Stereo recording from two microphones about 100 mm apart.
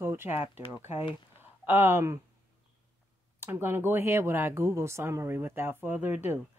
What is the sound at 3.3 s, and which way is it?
A woman's voice, 20° right (ahead or behind).